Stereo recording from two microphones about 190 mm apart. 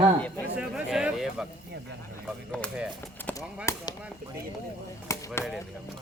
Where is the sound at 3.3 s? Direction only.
15° left (ahead or behind).